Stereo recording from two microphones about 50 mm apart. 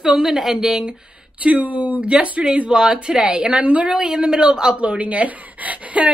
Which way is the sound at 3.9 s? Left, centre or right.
Centre.